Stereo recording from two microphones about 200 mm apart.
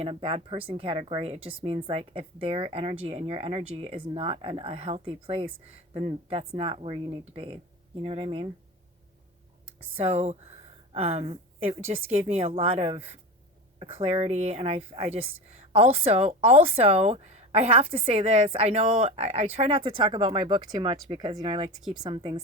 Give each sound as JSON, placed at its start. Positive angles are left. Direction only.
{"t": 0.0, "sound": "a woman's voice", "side_deg": -25}
{"t": 10.0, "sound": "a woman's voice", "side_deg": -30}
{"t": 21.7, "sound": "speech", "side_deg": 0}
{"t": 22.0, "sound": "speech", "side_deg": -25}